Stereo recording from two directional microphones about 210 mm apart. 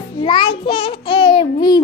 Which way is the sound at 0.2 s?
25° left (ahead or behind).